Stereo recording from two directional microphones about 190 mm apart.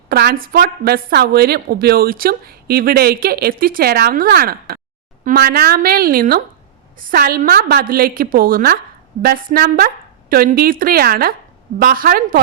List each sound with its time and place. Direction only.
0.1 s a woman's voice: 55° right (ahead or behind)